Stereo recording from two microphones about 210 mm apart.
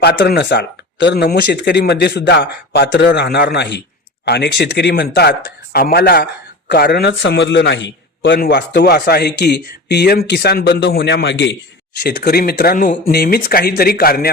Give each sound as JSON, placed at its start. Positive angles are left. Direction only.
{"t": 0.0, "sound": "a man's voice", "side_deg": 50}